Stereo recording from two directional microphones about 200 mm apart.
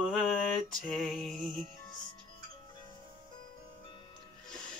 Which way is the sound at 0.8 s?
Centre (ahead or behind).